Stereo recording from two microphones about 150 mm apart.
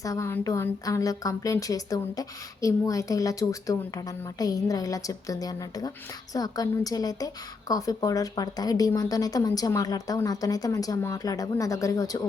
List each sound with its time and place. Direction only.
0.0 s a woman's voice: 20° left (ahead or behind)